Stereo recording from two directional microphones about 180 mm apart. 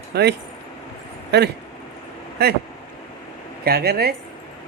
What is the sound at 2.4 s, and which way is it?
Speech, 65° right (ahead or behind).